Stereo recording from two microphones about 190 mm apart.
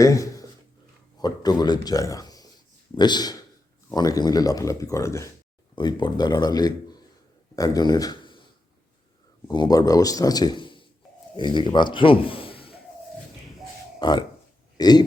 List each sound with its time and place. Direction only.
0.0 s a sound: 15° left (ahead or behind)
1.2 s a man's voice: 20° left (ahead or behind)
9.5 s a man's voice: 20° left (ahead or behind)
14.0 s a man's voice: 20° left (ahead or behind)